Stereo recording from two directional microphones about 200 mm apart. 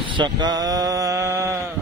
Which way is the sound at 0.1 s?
25° right (ahead or behind).